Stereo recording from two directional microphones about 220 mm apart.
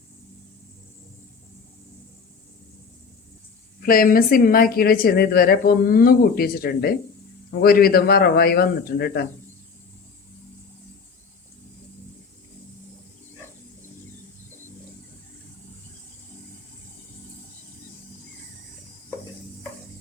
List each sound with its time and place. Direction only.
3.8 s a man's voice: 40° left (ahead or behind)